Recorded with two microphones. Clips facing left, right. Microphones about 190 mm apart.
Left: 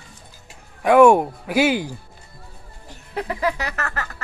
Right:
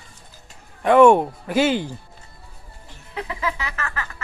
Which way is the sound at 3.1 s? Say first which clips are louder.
Left 4 dB; 45° left (ahead or behind).